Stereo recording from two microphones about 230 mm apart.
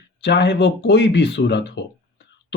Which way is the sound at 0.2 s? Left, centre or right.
Left.